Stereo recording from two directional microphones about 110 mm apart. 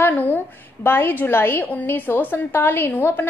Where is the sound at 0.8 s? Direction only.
20° left (ahead or behind).